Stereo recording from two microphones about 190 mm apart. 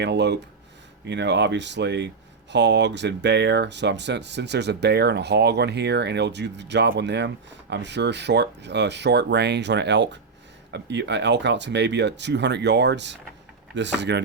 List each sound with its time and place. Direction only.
0.0 s speech: 65° right (ahead or behind)